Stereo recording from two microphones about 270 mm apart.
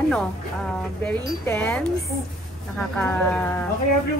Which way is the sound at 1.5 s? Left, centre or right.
Centre.